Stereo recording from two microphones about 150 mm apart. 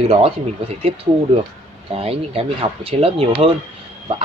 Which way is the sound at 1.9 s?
40° right (ahead or behind).